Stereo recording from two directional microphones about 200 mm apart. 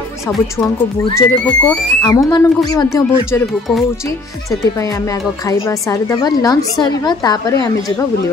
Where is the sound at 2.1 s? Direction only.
20° left (ahead or behind).